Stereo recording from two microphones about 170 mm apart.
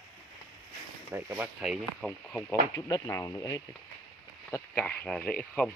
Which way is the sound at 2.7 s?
15° left (ahead or behind).